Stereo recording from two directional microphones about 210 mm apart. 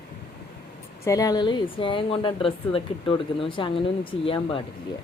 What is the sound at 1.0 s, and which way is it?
Speech, 15° left (ahead or behind).